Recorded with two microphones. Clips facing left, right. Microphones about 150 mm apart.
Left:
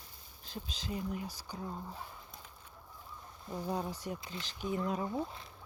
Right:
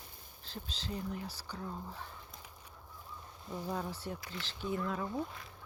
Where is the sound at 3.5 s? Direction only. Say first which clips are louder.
Left 2 dB; 15° left (ahead or behind).